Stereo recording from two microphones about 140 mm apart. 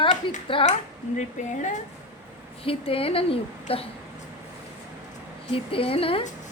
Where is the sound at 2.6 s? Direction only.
40° left (ahead or behind).